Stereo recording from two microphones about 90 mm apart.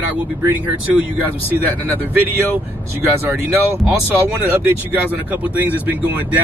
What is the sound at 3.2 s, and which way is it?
Speech, 25° right (ahead or behind).